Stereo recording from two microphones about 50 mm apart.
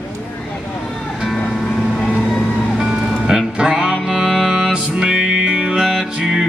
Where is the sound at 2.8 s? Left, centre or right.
Centre.